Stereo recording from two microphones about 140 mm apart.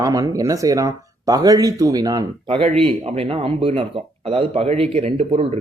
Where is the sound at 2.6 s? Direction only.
40° right (ahead or behind).